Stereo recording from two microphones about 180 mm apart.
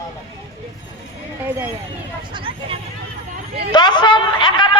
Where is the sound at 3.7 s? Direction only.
25° left (ahead or behind).